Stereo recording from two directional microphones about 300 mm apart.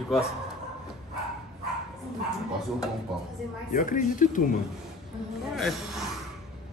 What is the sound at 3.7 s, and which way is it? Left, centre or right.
Speech, left.